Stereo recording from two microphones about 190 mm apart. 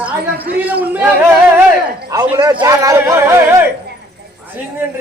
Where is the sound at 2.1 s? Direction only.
20° right (ahead or behind).